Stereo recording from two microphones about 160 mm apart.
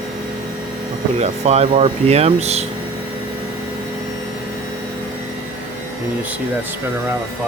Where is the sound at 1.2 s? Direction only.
45° right (ahead or behind).